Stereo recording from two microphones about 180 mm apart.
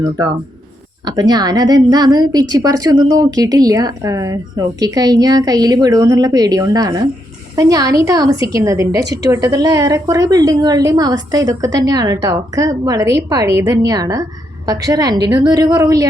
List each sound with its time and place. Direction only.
0.0 s a woman's voice: 20° right (ahead or behind)